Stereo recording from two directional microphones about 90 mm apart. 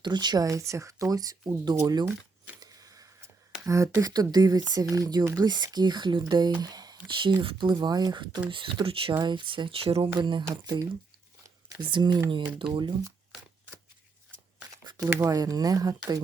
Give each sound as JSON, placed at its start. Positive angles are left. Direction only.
{"t": 0.0, "sound": "speech", "side_deg": -55}
{"t": 2.6, "sound": "a sound", "side_deg": -40}
{"t": 4.0, "sound": "speech", "side_deg": -45}
{"t": 7.1, "sound": "speech", "side_deg": -65}
{"t": 10.2, "sound": "speech", "side_deg": -60}
{"t": 10.5, "sound": "speech", "side_deg": -45}
{"t": 11.8, "sound": "speech", "side_deg": -60}
{"t": 14.8, "sound": "a sound", "side_deg": -45}
{"t": 15.3, "sound": "speech", "side_deg": -45}